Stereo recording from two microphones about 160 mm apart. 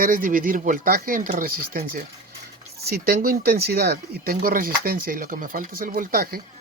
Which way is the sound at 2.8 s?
75° right (ahead or behind).